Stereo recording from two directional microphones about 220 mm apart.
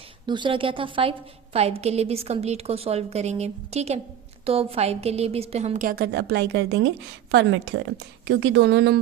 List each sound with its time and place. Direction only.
0.3 s a woman's voice: 20° right (ahead or behind); by 9.0 s 45° right (ahead or behind)